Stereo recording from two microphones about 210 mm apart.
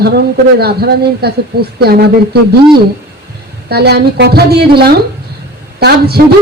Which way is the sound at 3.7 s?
50° right (ahead or behind).